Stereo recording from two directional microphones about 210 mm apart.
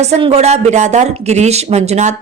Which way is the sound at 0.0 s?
30° right (ahead or behind).